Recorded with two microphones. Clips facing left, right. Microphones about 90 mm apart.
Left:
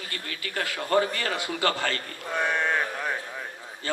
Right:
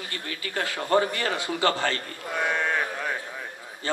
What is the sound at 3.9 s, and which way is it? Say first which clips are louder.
Speech: right 2 dB; 25° right (ahead or behind).